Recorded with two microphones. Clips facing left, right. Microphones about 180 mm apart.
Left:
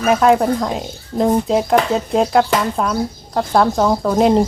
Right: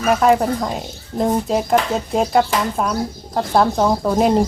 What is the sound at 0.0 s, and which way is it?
Speech, centre (ahead or behind).